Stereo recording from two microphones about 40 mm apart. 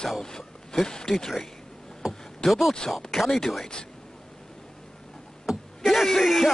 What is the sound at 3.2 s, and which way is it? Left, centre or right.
Speech, centre.